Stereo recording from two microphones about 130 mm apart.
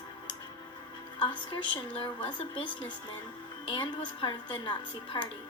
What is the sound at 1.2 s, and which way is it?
Speech, 40° left (ahead or behind).